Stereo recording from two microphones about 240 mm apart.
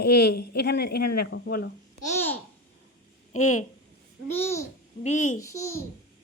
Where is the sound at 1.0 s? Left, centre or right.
Left.